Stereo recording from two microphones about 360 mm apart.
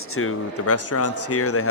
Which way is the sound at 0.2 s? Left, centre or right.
Left.